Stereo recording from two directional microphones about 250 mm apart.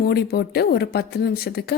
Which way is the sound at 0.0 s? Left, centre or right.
Left.